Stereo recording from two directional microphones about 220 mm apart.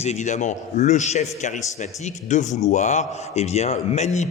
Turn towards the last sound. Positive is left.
turn(degrees=30)  # may be behind; listen again after turning